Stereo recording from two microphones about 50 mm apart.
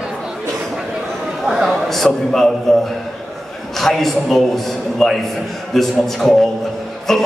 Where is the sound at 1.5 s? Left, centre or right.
Centre.